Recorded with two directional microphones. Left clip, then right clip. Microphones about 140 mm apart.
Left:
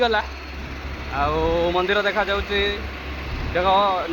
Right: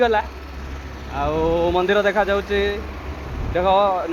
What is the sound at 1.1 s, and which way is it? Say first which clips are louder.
Speech: even; 55° right (ahead or behind).